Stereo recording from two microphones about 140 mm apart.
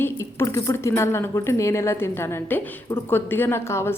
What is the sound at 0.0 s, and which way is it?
Speech, 20° left (ahead or behind).